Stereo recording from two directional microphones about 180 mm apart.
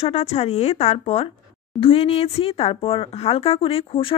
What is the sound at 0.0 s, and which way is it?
Speech, 35° left (ahead or behind).